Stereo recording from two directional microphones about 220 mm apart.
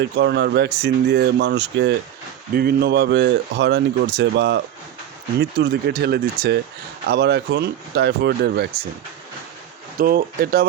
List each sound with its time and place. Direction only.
0.2 s speech: 50° right (ahead or behind)
10.0 s speech: 40° right (ahead or behind)